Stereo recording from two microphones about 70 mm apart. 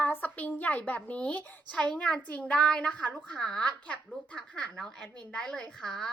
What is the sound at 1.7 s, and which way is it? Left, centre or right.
Speech, centre.